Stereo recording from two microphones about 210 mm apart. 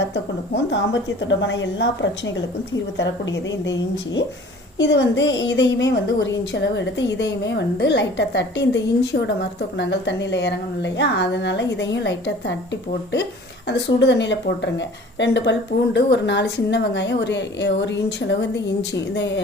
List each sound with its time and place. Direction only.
0.1 s a woman's voice: 60° left (ahead or behind)
4.8 s a woman's voice: 55° left (ahead or behind)
13.7 s a woman's voice: 55° left (ahead or behind)